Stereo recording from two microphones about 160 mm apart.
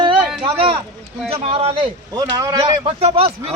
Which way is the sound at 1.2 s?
40° right (ahead or behind).